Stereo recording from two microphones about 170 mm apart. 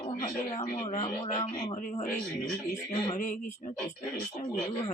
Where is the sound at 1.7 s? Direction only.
45° left (ahead or behind).